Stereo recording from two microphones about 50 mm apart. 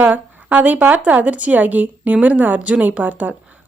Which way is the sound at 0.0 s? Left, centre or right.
Right.